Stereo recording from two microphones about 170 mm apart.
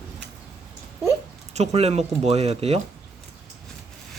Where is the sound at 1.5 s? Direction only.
40° right (ahead or behind).